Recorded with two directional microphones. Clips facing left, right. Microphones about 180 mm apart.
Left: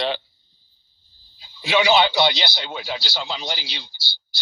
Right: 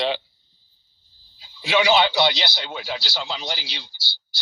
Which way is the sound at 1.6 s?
20° left (ahead or behind).